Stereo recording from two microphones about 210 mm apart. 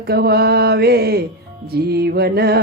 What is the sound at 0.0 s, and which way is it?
Speech, 50° right (ahead or behind).